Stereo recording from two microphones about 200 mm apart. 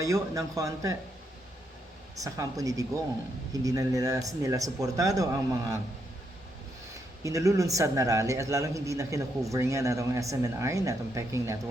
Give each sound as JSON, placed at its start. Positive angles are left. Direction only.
{"t": 0.0, "sound": "speech", "side_deg": -15}
{"t": 2.1, "sound": "speech", "side_deg": -15}
{"t": 7.3, "sound": "speech", "side_deg": -15}